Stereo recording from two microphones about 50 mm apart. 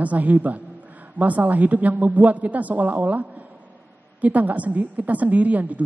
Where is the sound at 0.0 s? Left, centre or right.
Right.